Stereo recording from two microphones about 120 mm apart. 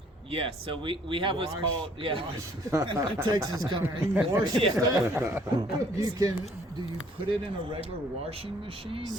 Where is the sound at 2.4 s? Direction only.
30° right (ahead or behind).